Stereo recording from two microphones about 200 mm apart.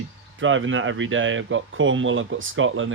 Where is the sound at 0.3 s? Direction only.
75° right (ahead or behind).